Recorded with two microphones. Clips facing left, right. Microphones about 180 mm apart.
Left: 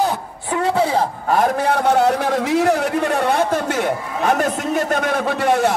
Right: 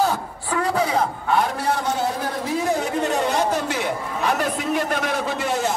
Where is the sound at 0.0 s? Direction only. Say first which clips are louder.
Left 1 dB; 20° left (ahead or behind).